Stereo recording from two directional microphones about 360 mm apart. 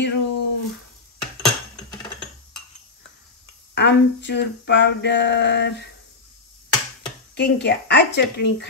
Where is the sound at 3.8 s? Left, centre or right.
Left.